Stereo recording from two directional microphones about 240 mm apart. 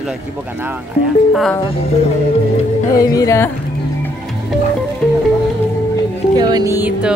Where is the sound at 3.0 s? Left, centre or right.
Centre.